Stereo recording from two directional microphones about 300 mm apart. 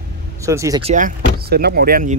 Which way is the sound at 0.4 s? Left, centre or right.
Centre.